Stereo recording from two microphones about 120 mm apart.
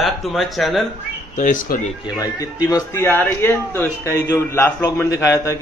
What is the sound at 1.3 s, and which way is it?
Speech, 90° left.